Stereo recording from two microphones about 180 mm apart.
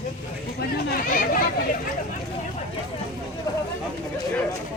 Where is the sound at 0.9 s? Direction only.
50° left (ahead or behind).